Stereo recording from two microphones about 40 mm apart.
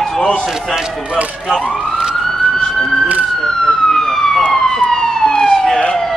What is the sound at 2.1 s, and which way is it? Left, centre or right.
Police car, centre.